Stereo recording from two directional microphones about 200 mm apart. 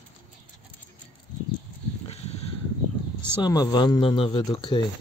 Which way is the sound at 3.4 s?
20° left (ahead or behind).